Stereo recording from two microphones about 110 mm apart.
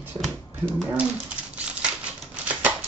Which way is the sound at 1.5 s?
10° right (ahead or behind).